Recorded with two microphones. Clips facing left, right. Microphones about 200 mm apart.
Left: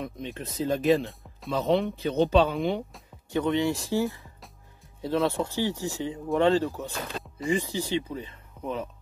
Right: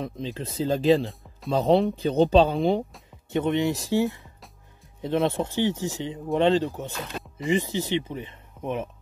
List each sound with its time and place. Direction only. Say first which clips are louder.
0.0 s speech: right 3 dB; 30° right (ahead or behind)
3.3 s speech: right 1 dB; 20° right (ahead or behind)